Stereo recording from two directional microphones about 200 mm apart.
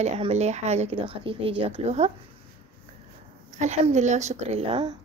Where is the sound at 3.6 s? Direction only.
35° right (ahead or behind).